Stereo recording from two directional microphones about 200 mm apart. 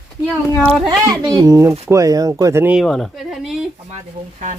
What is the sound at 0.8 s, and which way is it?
Speech, 20° right (ahead or behind).